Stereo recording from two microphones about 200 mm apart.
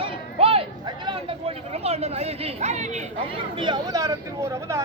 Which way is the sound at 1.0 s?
25° right (ahead or behind).